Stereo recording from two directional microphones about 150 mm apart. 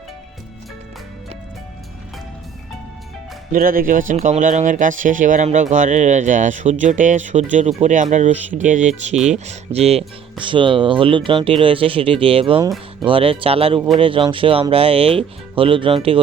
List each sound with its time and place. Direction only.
3.5 s speech: 70° right (ahead or behind); by 16.2 s 35° right (ahead or behind)